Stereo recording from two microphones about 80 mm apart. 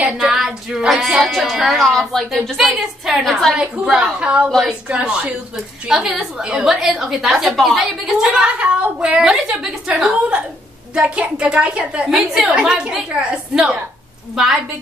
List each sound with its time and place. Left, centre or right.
0.0 s child singing: centre
3.5 s a woman's voice: centre
12.2 s child singing: centre
12.5 s a woman's voice: centre